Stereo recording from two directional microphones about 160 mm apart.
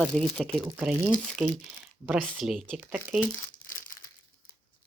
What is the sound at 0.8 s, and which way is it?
Speech, 10° right (ahead or behind).